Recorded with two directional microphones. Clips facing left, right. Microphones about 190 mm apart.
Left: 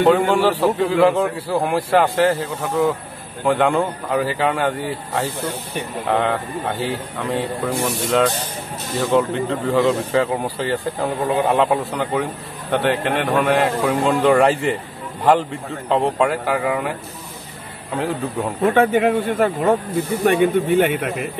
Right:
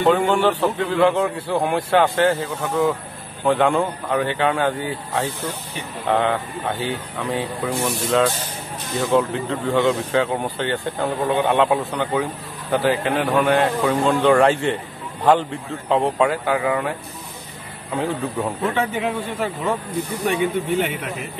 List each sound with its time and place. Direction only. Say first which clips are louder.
0.0 s speech: left 2 dB; centre (ahead or behind)
18.6 s speech: left 10 dB; 50° left (ahead or behind)